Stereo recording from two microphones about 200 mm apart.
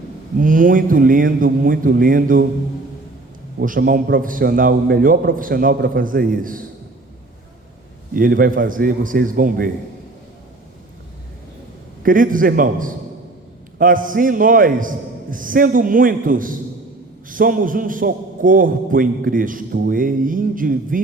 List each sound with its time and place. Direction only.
0.3 s a man's voice: 40° right (ahead or behind)
3.6 s a man's voice: 45° right (ahead or behind)
8.1 s a man's voice: 45° right (ahead or behind)
12.0 s a man's voice: 45° right (ahead or behind)